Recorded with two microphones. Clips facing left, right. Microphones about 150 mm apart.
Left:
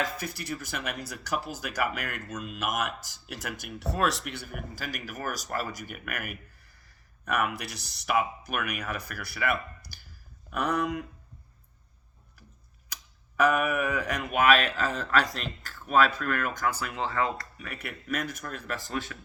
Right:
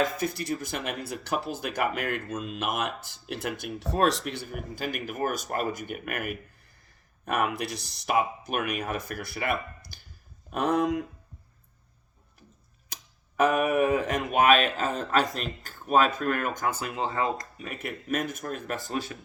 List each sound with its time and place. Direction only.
0.0 s speech: 25° right (ahead or behind)
12.9 s speech: 25° right (ahead or behind)